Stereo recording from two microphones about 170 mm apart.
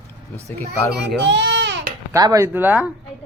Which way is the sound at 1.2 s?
90° right.